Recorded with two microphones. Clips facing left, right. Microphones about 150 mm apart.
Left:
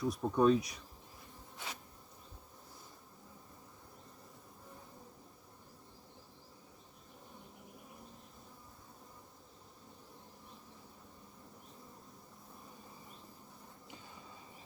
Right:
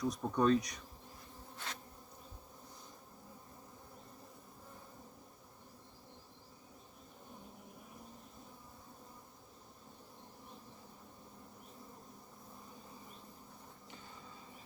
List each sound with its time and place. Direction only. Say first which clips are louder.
0.0 s insect: left 3 dB; 5° left (ahead or behind)